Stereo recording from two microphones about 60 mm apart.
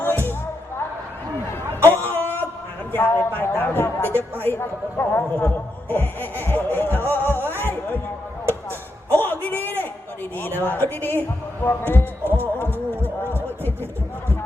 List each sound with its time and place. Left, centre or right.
1.8 s a sound: left
2.9 s a man's voice: left
7.1 s music: left
9.1 s a sound: left
10.4 s a man's voice: left
12.2 s music: right